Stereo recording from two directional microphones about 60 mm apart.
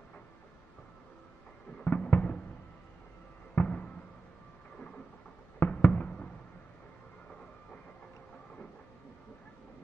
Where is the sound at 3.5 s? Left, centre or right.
Left.